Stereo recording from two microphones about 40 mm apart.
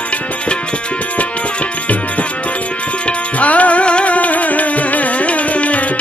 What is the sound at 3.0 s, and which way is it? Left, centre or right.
Music, left.